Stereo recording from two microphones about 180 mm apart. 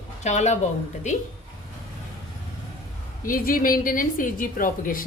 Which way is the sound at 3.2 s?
50° left (ahead or behind).